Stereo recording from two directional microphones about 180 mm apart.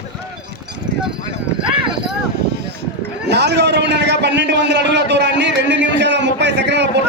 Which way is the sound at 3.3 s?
70° right (ahead or behind).